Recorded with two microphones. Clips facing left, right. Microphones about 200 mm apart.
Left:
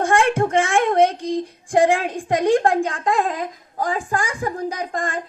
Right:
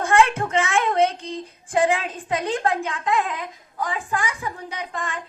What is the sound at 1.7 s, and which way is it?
A woman's voice, 45° left (ahead or behind).